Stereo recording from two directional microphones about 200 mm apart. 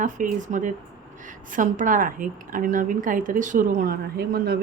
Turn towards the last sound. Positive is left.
turn(degrees=-50)  # may be behind; listen again after turning